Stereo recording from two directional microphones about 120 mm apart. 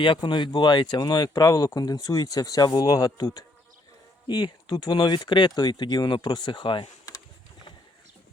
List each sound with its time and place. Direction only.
0.0 s speech: 40° left (ahead or behind)